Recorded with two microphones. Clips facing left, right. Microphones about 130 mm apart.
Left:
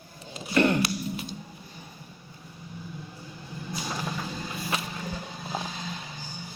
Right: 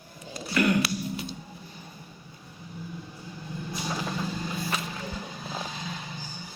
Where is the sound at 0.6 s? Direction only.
30° left (ahead or behind).